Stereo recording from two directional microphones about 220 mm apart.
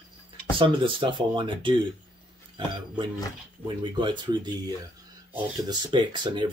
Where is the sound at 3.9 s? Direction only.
20° right (ahead or behind).